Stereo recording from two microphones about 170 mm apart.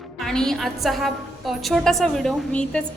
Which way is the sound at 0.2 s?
5° left (ahead or behind).